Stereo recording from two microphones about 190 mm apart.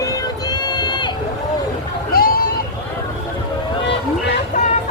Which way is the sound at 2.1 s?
50° left (ahead or behind).